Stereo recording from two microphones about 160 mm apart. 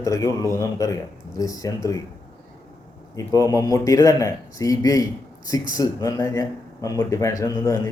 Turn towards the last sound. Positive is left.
turn(degrees=20)  # may be behind; listen again after turning